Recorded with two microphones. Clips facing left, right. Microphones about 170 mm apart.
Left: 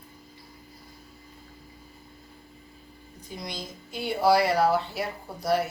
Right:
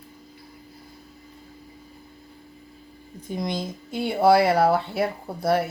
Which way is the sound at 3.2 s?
50° right (ahead or behind).